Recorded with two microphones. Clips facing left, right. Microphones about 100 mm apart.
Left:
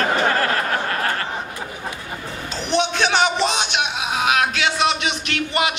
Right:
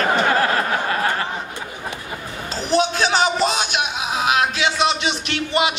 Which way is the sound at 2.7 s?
35° right (ahead or behind).